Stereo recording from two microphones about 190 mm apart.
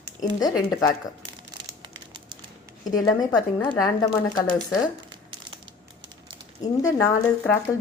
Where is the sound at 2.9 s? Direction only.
20° left (ahead or behind).